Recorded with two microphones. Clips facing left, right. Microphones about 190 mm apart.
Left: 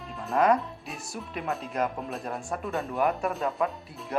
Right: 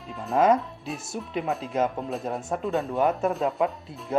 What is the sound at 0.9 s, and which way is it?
Speech, 25° right (ahead or behind).